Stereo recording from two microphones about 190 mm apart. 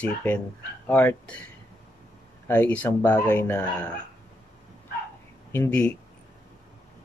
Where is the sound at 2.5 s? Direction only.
5° left (ahead or behind).